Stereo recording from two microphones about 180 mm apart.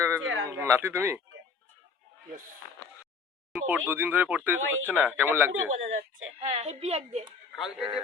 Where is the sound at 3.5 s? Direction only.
10° right (ahead or behind).